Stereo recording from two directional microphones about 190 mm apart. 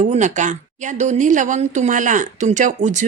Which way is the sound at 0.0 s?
40° right (ahead or behind).